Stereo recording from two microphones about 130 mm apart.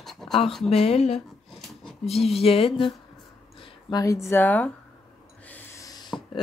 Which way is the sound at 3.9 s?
25° left (ahead or behind).